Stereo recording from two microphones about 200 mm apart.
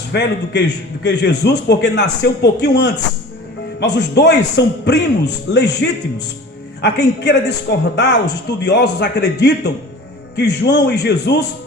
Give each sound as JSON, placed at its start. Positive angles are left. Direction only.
{"t": 0.1, "sound": "a man's voice", "side_deg": 60}
{"t": 3.9, "sound": "a man's voice", "side_deg": 60}